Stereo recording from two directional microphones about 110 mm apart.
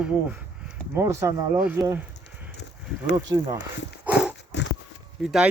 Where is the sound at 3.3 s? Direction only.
35° right (ahead or behind).